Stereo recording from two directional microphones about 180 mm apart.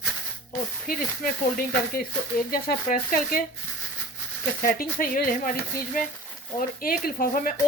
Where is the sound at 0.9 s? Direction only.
50° left (ahead or behind).